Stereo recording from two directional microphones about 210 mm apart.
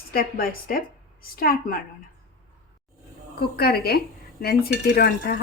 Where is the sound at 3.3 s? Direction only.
50° left (ahead or behind).